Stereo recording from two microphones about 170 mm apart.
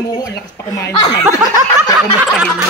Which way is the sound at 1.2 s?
15° right (ahead or behind).